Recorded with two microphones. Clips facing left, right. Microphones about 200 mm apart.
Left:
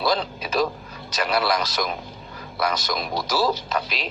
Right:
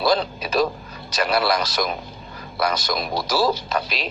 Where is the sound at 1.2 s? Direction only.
40° right (ahead or behind).